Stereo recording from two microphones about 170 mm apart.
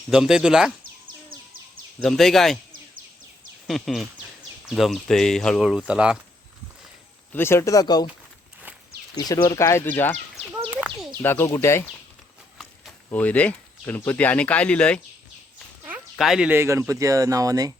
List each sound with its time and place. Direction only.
0.1 s speech: 5° right (ahead or behind)
2.0 s speech: centre (ahead or behind)
3.7 s speech: centre (ahead or behind)
7.3 s speech: 15° left (ahead or behind)
9.1 s speech: 20° left (ahead or behind)
10.8 s a sound: centre (ahead or behind)
11.2 s speech: 15° left (ahead or behind)
13.1 s speech: 10° left (ahead or behind); by 17.7 s 20° right (ahead or behind)